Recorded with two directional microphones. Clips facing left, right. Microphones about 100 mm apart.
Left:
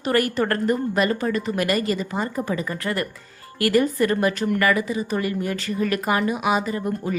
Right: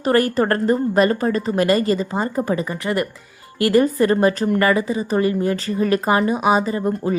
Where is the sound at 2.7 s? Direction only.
20° right (ahead or behind).